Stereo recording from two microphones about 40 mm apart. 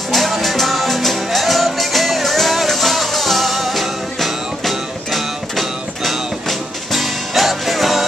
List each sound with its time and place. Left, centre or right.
0.1 s music: centre